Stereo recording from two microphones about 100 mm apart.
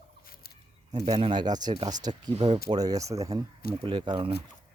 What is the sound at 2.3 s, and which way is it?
Speech, 90° right.